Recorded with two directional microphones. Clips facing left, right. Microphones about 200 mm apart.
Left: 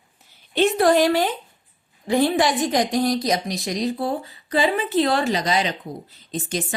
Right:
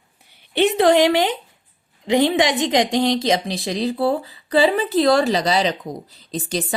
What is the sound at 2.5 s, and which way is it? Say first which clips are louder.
A woman's voice: right 2 dB; 20° right (ahead or behind).